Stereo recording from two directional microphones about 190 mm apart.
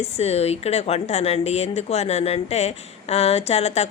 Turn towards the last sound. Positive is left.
turn(degrees=35)  # may be behind; listen again after turning